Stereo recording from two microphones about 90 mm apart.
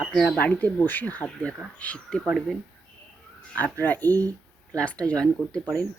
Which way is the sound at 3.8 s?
20° left (ahead or behind).